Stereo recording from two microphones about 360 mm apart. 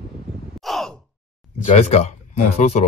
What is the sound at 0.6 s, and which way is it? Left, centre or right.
Sigh, centre.